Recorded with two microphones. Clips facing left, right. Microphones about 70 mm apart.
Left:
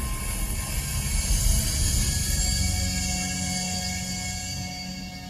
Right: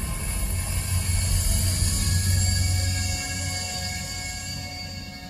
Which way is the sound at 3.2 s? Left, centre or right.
Right.